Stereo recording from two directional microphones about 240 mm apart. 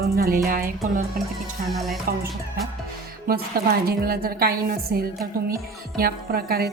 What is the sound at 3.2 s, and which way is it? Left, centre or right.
A woman's voice, right.